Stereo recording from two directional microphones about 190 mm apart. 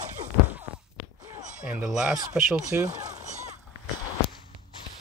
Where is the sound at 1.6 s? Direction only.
5° right (ahead or behind).